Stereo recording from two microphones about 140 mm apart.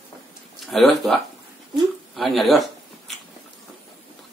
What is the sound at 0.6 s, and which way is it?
Speech, centre (ahead or behind).